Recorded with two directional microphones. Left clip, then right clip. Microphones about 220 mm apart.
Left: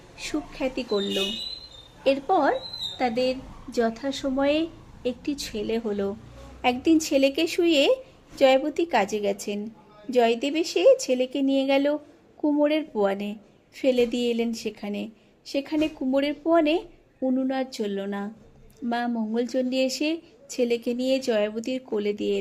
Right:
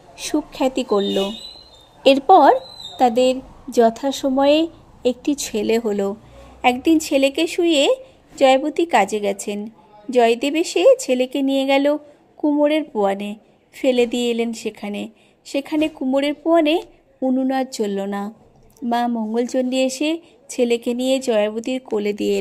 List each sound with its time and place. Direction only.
0.2 s a woman's voice: 25° right (ahead or behind)